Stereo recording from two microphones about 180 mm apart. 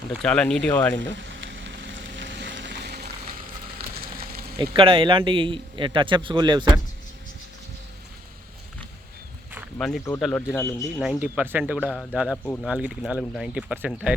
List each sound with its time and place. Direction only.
0.1 s a man's voice: 5° left (ahead or behind)
1.1 s frying: 85° right; by 3.1 s 65° right (ahead or behind)
3.8 s a sound: 60° right (ahead or behind)
4.8 s a man's voice: 30° right (ahead or behind)
9.7 s a man's voice: centre (ahead or behind)
11.0 s speech: 5° right (ahead or behind)